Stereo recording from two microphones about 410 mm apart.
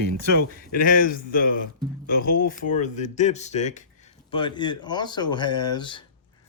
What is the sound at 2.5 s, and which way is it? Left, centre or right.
Speech, centre.